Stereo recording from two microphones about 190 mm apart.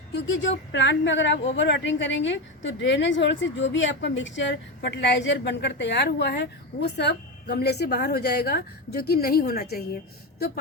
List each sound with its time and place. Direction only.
0.1 s a woman's voice: 70° left (ahead or behind)